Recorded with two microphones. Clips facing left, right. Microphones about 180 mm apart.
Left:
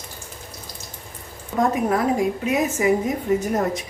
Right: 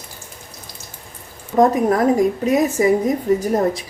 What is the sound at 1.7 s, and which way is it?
A woman's voice, 40° right (ahead or behind).